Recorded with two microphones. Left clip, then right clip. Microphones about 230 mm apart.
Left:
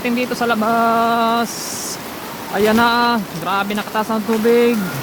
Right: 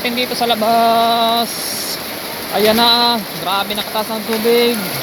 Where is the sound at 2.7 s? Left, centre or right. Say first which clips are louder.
Right 2 dB; centre.